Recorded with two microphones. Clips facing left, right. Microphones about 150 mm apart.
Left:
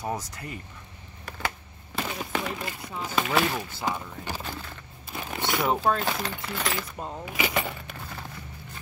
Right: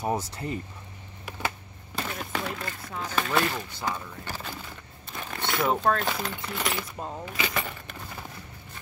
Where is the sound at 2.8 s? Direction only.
10° left (ahead or behind).